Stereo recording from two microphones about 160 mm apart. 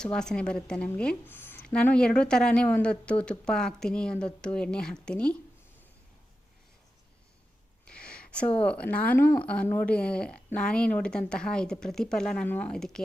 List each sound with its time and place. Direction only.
0.0 s a woman's voice: 5° left (ahead or behind)
7.9 s speech: 5° left (ahead or behind)